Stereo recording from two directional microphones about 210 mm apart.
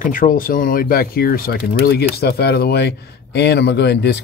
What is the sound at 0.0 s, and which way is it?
Speech, 40° left (ahead or behind).